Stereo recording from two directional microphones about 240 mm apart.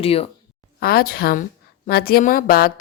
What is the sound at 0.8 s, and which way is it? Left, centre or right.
Speech, left.